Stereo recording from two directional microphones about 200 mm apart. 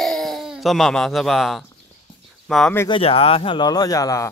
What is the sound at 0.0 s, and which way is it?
Speech, centre (ahead or behind).